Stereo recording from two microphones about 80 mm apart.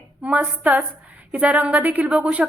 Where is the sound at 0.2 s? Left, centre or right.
Centre.